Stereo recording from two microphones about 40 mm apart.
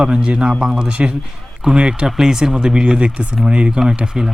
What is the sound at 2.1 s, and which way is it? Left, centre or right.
A man's voice, centre.